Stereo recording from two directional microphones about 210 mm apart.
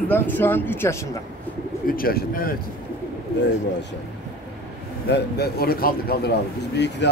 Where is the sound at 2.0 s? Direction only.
45° left (ahead or behind).